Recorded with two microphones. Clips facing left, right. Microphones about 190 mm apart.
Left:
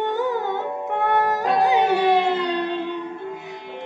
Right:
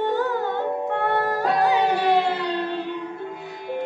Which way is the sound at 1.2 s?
20° left (ahead or behind).